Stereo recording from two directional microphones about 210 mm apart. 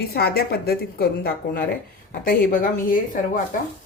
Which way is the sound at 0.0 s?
50° left (ahead or behind).